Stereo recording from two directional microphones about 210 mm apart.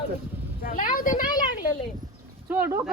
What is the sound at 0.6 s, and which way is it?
Speech, 40° left (ahead or behind).